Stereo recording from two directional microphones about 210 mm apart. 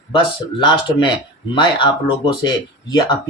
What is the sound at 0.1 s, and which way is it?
Speech, 25° left (ahead or behind).